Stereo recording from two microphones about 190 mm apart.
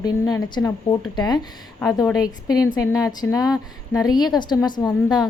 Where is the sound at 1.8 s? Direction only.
15° left (ahead or behind).